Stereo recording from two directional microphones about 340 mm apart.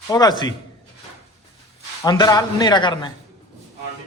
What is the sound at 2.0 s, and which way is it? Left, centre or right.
A man's voice, centre.